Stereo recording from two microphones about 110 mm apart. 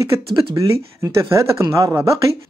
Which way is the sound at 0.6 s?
30° right (ahead or behind).